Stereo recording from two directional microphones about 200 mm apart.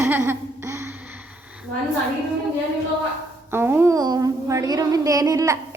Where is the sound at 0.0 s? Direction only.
10° right (ahead or behind).